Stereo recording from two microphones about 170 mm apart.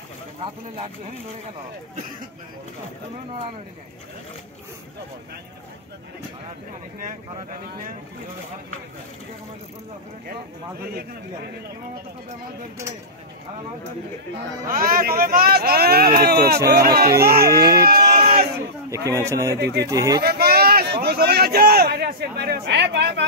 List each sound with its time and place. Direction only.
10.8 s speech: 65° right (ahead or behind)
14.7 s speech: 55° right (ahead or behind)
17.5 s a man's voice: 20° right (ahead or behind)
17.8 s a sound: 65° right (ahead or behind)
18.9 s a man's voice: 20° right (ahead or behind)
20.2 s a sound: 65° right (ahead or behind); by 23.2 s 85° right